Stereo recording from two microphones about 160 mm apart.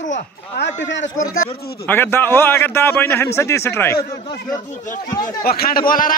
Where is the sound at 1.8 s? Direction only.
15° left (ahead or behind).